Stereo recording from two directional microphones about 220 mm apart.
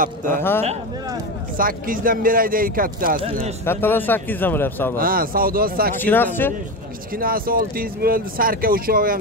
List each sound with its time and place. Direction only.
0.0 s speech: 35° right (ahead or behind)
0.4 s a man's voice: 10° left (ahead or behind)
1.6 s speech: 40° right (ahead or behind)
3.6 s a man's voice: 10° left (ahead or behind)
4.9 s speech: 40° right (ahead or behind)
6.0 s a man's voice: 10° left (ahead or behind)
7.2 s speech: 40° right (ahead or behind)